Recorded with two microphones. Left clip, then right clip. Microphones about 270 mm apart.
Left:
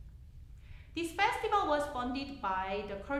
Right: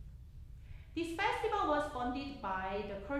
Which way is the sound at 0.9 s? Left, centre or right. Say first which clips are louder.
Left 4 dB; left.